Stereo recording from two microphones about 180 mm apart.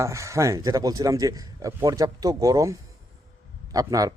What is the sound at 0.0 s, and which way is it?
A man's voice, 15° right (ahead or behind).